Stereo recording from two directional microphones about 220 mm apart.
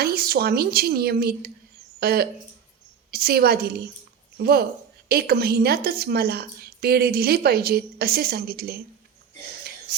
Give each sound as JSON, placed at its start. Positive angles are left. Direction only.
{"t": 0.0, "sound": "a woman's voice", "side_deg": -45}